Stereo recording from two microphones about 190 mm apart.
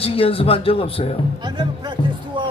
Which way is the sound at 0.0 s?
30° left (ahead or behind).